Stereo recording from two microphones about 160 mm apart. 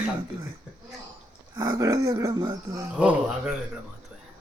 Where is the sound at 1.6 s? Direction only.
25° right (ahead or behind).